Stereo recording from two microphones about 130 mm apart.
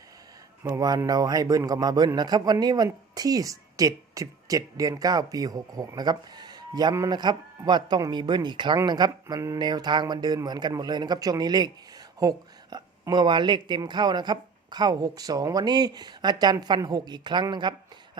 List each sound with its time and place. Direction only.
0.6 s a woman's voice: 25° right (ahead or behind)